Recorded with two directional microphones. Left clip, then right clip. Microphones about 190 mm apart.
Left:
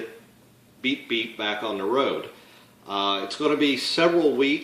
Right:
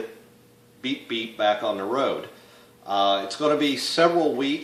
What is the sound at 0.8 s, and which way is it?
Speech, 25° right (ahead or behind).